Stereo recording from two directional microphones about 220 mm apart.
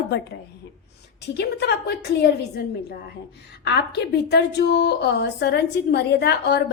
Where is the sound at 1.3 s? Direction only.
50° left (ahead or behind).